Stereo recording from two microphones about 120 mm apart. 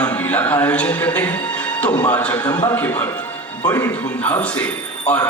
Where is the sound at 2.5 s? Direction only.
35° left (ahead or behind).